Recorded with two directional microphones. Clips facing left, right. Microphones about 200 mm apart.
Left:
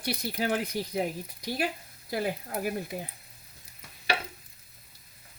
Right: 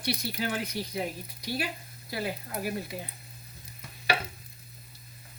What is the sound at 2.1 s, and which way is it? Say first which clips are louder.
Speech: left 3 dB; 50° left (ahead or behind).